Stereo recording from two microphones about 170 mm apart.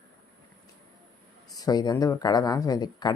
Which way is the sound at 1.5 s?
25° left (ahead or behind).